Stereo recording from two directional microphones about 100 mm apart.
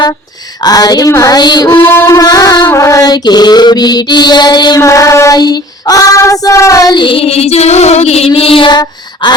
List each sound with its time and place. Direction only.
0.6 s female singing: 40° left (ahead or behind)
1.1 s mantra: 35° left (ahead or behind)
1.7 s a sound: 25° left (ahead or behind)
2.1 s female singing: 35° left (ahead or behind)
2.7 s mantra: 30° left (ahead or behind)
4.8 s female singing: 30° left (ahead or behind)
6.9 s female singing: 55° left (ahead or behind); by 8.3 s 90° left
8.3 s a sound: 65° left (ahead or behind); by 9.3 s 45° left (ahead or behind)